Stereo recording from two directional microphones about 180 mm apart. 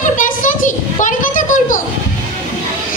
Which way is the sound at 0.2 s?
45° left (ahead or behind).